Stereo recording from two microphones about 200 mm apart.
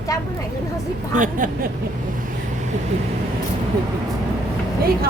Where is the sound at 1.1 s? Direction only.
40° right (ahead or behind).